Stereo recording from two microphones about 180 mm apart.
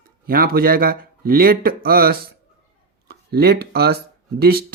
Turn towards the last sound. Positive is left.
turn(degrees=-60)  # may be behind; listen again after turning